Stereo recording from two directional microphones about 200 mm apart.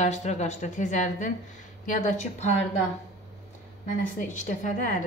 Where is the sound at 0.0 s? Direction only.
35° left (ahead or behind).